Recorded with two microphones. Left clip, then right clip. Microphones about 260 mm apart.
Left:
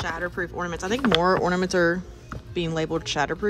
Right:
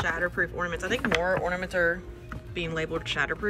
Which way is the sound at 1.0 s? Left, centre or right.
Left.